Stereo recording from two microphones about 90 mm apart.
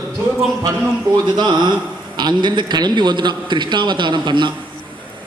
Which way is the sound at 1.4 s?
55° right (ahead or behind).